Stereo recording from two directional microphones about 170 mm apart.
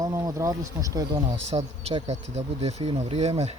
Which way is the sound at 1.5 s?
35° right (ahead or behind).